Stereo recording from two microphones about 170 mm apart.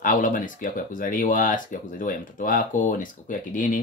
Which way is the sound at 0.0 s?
50° left (ahead or behind).